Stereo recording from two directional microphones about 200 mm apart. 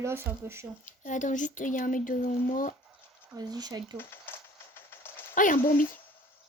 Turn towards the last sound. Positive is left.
turn(degrees=40)  # may be behind; listen again after turning